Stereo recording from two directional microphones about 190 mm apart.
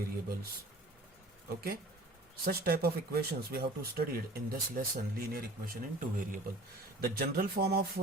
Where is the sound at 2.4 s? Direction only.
55° right (ahead or behind).